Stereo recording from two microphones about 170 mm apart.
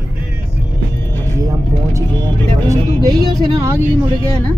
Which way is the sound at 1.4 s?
20° right (ahead or behind).